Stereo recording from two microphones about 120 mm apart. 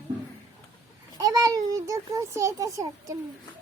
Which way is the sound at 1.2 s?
30° right (ahead or behind).